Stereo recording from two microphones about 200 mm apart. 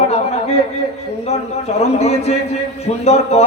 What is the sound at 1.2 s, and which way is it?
A man's voice, 30° left (ahead or behind).